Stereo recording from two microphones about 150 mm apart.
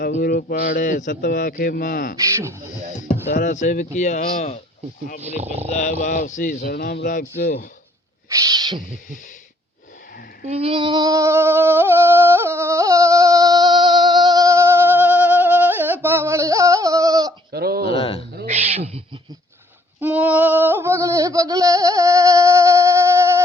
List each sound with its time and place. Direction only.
0.2 s a man's voice: 75° left (ahead or behind)
0.7 s a man's voice: 65° left (ahead or behind)
2.1 s owl: 20° right (ahead or behind)
3.2 s speech: 55° left (ahead or behind)
5.2 s speech: 45° right (ahead or behind)
5.7 s speech: 55° left (ahead or behind); by 7.7 s 80° left
8.3 s owl: 25° right (ahead or behind)
10.5 s a sound: 35° right (ahead or behind)
17.5 s a sound: 90° right
17.8 s a sound: 40° left (ahead or behind)
18.4 s owl: 45° right (ahead or behind)
20.0 s a sound: 10° right (ahead or behind)